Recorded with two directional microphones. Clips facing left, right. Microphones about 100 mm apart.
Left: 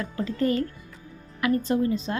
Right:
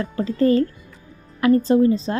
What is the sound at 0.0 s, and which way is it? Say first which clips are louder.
Speech: right 6 dB; 35° right (ahead or behind).